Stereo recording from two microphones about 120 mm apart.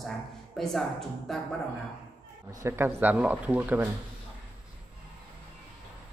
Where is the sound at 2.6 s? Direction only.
20° right (ahead or behind).